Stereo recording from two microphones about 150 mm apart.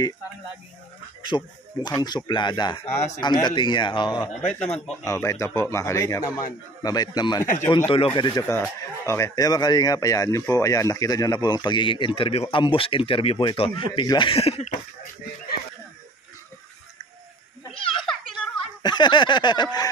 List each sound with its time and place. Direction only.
1.2 s speech: 30° left (ahead or behind)
4.4 s speech: 5° left (ahead or behind)
5.0 s speech: 20° left (ahead or behind)
8.2 s speech: 20° left (ahead or behind); by 14.7 s 40° left (ahead or behind)
18.3 s speech: 30° left (ahead or behind)